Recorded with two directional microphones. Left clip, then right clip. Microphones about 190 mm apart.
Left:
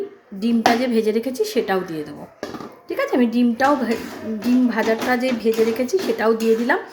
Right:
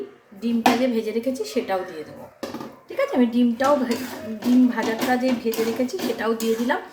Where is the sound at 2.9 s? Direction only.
40° left (ahead or behind).